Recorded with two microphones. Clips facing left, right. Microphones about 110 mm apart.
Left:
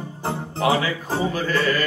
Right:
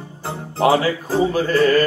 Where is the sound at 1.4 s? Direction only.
40° right (ahead or behind).